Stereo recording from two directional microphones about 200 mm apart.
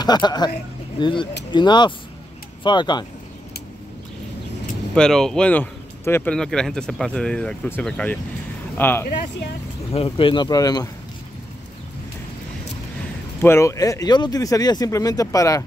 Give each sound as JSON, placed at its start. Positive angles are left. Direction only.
{"t": 0.0, "sound": "speech", "side_deg": 20}
{"t": 4.9, "sound": "speech", "side_deg": 5}
{"t": 9.9, "sound": "speech", "side_deg": 25}
{"t": 13.4, "sound": "speech", "side_deg": 15}